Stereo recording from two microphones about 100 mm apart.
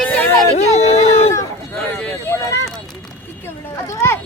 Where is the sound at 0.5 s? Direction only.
90° left.